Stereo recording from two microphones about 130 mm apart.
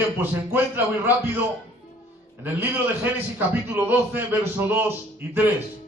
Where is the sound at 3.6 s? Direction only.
15° right (ahead or behind).